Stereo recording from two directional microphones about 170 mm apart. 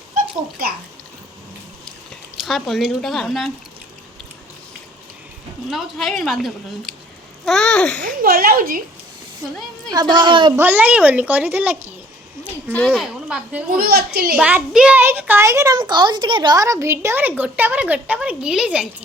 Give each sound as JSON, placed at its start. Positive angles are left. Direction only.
{"t": 2.4, "sound": "a woman's voice", "side_deg": 0}
{"t": 5.7, "sound": "a woman's voice", "side_deg": 0}
{"t": 8.0, "sound": "a woman's voice", "side_deg": -55}
{"t": 9.9, "sound": "a child's voice", "side_deg": -25}
{"t": 10.6, "sound": "a child's voice", "side_deg": -10}
{"t": 12.7, "sound": "speech", "side_deg": 5}
{"t": 13.2, "sound": "a child's voice", "side_deg": -5}
{"t": 13.7, "sound": "a child's voice", "side_deg": -65}
{"t": 14.3, "sound": "a child's voice", "side_deg": -5}